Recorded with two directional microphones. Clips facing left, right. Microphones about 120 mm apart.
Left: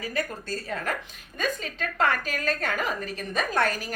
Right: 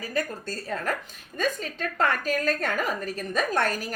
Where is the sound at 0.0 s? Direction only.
40° right (ahead or behind).